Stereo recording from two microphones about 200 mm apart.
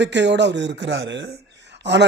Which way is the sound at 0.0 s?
60° right (ahead or behind).